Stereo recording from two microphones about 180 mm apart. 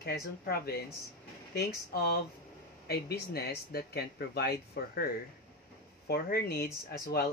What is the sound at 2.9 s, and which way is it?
Speech, 60° left (ahead or behind).